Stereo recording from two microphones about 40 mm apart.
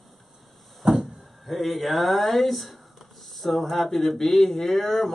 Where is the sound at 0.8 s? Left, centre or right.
Right.